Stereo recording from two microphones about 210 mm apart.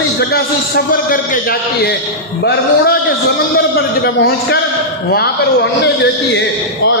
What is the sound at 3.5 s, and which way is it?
A man's voice, 45° left (ahead or behind).